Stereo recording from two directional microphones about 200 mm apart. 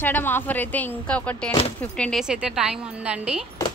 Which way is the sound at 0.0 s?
10° left (ahead or behind).